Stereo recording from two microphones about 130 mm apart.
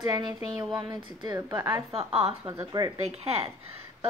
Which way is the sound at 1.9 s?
50° right (ahead or behind).